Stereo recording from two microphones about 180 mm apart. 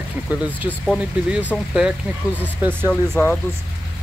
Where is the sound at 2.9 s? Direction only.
5° left (ahead or behind).